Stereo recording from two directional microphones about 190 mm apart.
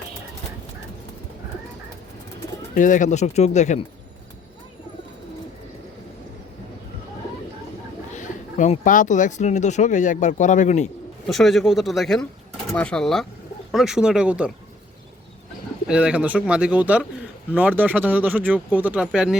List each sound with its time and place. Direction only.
2.7 s speech: 45° left (ahead or behind)
8.1 s speech: 40° left (ahead or behind)
11.3 s speech: centre (ahead or behind)
15.9 s speech: 5° right (ahead or behind)